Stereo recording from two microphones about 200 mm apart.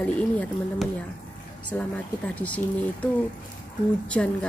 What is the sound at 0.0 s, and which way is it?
A woman's voice, 5° left (ahead or behind).